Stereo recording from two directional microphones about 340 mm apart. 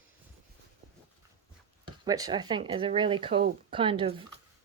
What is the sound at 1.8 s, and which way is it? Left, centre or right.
Speech, centre.